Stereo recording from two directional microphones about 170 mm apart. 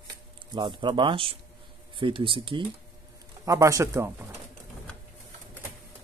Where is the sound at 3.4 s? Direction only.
20° right (ahead or behind).